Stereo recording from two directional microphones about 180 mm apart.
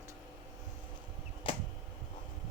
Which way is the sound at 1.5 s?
30° left (ahead or behind).